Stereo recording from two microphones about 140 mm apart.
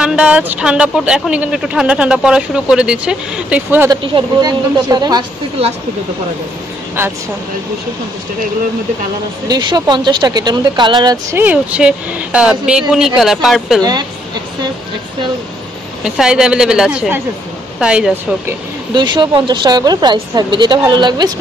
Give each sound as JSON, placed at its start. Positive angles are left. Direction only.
{"t": 0.0, "sound": "speech", "side_deg": -5}
{"t": 3.9, "sound": "a woman's voice", "side_deg": -35}
{"t": 9.5, "sound": "a woman's voice", "side_deg": -30}
{"t": 11.3, "sound": "speech", "side_deg": -10}
{"t": 16.0, "sound": "a woman's voice", "side_deg": -5}
{"t": 18.9, "sound": "a woman's voice", "side_deg": -30}